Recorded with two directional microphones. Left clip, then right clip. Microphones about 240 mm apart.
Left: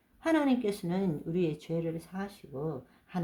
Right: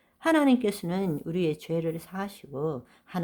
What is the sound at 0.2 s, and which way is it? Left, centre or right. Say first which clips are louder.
Speech: right 5 dB; right.